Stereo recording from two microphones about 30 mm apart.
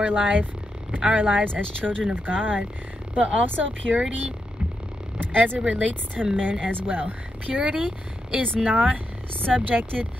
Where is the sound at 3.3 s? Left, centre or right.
Right.